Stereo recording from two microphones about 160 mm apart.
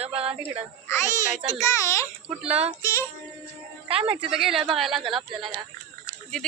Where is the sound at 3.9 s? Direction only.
35° right (ahead or behind).